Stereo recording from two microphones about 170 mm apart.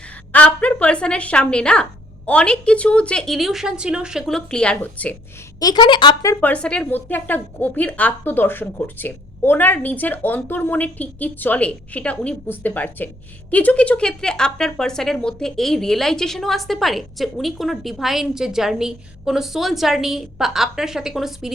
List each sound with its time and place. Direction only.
0.3 s speech: 10° left (ahead or behind)
5.5 s speech: 25° left (ahead or behind)
6.4 s a woman's voice: 5° left (ahead or behind)